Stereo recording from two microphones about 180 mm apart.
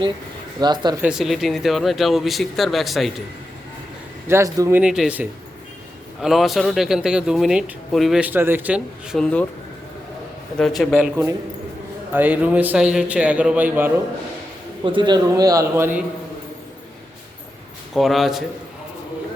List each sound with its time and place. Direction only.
0.6 s a man's voice: 25° right (ahead or behind)
1.0 s a man's voice: centre (ahead or behind)
4.3 s speech: 15° right (ahead or behind)
4.8 s a man's voice: 5° right (ahead or behind)
9.1 s a man's voice: 5° left (ahead or behind)
10.6 s a man's voice: centre (ahead or behind)
14.8 s a man's voice: 25° right (ahead or behind)
17.9 s a man's voice: centre (ahead or behind)